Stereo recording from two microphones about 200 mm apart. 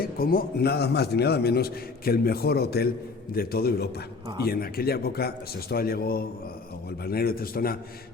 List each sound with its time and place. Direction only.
0.0 s a man's voice: 45° left (ahead or behind)